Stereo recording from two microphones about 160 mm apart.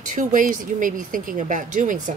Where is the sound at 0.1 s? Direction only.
55° right (ahead or behind).